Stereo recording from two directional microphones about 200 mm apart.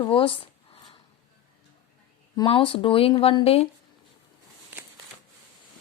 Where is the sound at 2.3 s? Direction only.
20° left (ahead or behind).